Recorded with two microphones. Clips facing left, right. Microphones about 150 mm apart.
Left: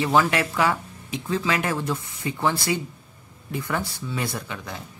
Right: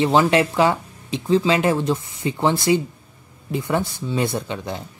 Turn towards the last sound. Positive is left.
turn(degrees=-25)  # may be behind; listen again after turning